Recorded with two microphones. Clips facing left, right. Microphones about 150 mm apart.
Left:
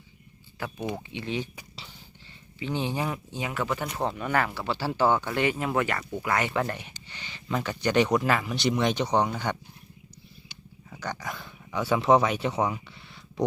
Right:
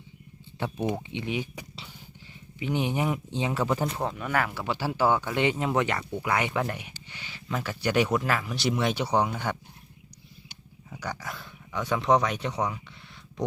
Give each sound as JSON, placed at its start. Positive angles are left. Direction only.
{"t": 0.9, "sound": "speech", "side_deg": -15}
{"t": 2.6, "sound": "speech", "side_deg": -15}
{"t": 3.8, "sound": "speech", "side_deg": 0}
{"t": 10.8, "sound": "a sound", "side_deg": -5}